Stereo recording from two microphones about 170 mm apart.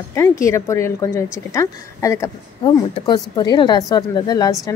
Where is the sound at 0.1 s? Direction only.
15° left (ahead or behind).